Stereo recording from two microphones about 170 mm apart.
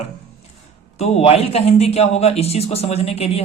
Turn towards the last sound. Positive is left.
turn(degrees=35)  # may be behind; listen again after turning